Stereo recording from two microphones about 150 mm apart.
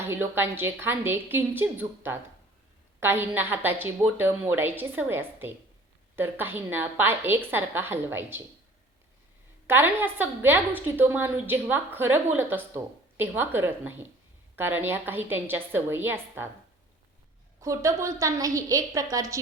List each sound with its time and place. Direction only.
0.0 s a woman's voice: 15° right (ahead or behind)
9.6 s a woman's voice: 15° right (ahead or behind)
17.6 s a woman's voice: 20° right (ahead or behind)